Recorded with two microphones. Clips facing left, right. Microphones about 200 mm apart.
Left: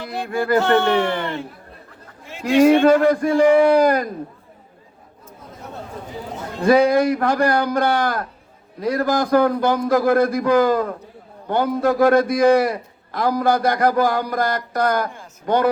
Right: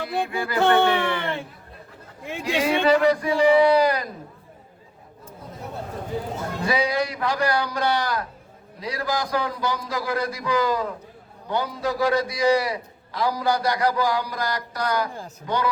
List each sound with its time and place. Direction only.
0.3 s a man's voice: 50° left (ahead or behind)
2.4 s a man's voice: 55° left (ahead or behind)
6.6 s a man's voice: 50° left (ahead or behind)